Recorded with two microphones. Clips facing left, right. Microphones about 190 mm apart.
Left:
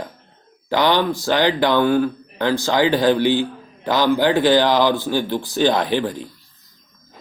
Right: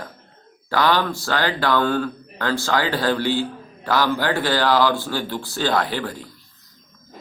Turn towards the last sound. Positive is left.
turn(degrees=20)  # may be behind; listen again after turning